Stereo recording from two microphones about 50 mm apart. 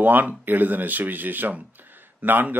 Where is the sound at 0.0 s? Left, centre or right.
Right.